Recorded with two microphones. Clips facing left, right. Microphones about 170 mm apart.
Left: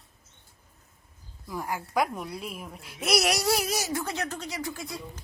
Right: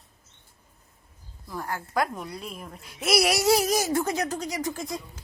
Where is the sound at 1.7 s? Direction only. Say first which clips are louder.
Even; 5° left (ahead or behind).